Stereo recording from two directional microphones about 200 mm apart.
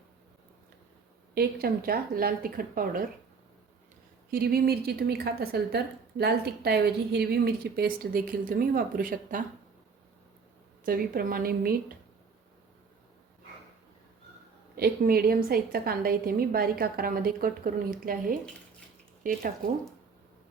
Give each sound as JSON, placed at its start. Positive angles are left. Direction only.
{"t": 1.4, "sound": "a woman's voice", "side_deg": -50}
{"t": 4.3, "sound": "a woman's voice", "side_deg": -50}
{"t": 10.8, "sound": "a woman's voice", "side_deg": -50}
{"t": 14.8, "sound": "a woman's voice", "side_deg": -50}